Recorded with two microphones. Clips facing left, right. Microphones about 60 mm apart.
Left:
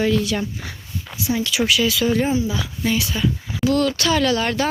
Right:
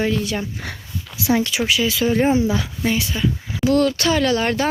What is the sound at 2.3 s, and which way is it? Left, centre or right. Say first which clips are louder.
Speech: right 4 dB; right.